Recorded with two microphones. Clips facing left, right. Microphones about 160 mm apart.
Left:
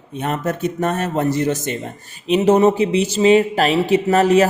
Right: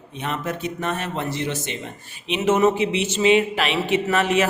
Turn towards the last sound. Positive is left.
turn(degrees=40)  # may be behind; listen again after turning